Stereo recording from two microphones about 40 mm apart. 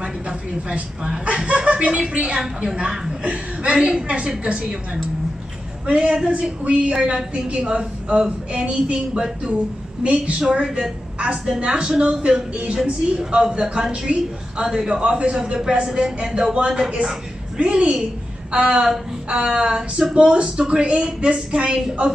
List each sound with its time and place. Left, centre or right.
0.0 s a sound: right
1.2 s a woman's voice: right
5.9 s a woman's voice: right
6.9 s a woman's voice: centre
7.3 s a woman's voice: right
10.4 s a woman's voice: centre